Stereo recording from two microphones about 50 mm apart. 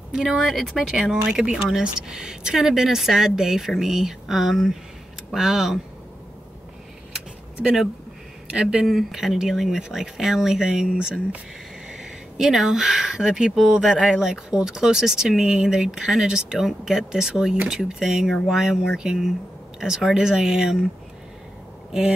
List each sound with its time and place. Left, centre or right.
0.1 s speech: centre
0.4 s speech: centre
7.6 s speech: centre
8.5 s speech: centre
8.8 s speech: centre